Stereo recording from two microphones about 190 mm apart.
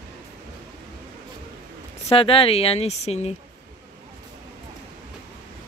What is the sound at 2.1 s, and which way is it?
Speech, 30° left (ahead or behind).